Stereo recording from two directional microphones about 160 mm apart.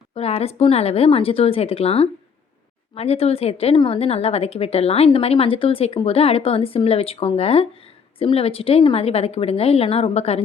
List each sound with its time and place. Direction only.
0.1 s a woman's voice: 40° left (ahead or behind)